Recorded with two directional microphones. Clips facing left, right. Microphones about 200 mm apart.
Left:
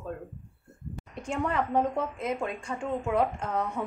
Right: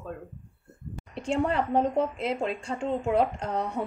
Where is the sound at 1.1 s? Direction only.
30° right (ahead or behind).